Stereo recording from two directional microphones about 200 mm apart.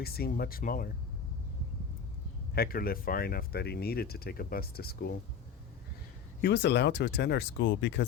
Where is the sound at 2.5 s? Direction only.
50° left (ahead or behind).